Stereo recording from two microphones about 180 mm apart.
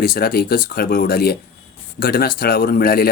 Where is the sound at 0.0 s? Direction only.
55° left (ahead or behind).